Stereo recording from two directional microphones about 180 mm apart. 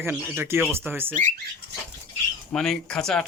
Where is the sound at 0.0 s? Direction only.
15° right (ahead or behind).